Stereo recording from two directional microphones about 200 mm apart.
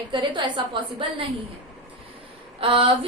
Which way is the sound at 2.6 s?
25° right (ahead or behind).